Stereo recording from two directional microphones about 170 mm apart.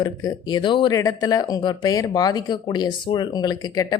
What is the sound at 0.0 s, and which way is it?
Speech, 25° left (ahead or behind).